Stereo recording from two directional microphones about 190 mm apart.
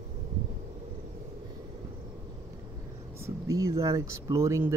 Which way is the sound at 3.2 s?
15° right (ahead or behind).